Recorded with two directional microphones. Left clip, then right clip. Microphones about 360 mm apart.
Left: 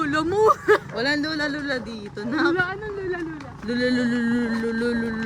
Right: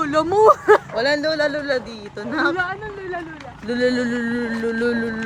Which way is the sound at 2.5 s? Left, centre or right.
Centre.